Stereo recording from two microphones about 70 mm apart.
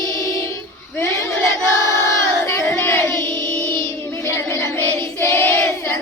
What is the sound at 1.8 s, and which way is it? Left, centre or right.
Crowd, left.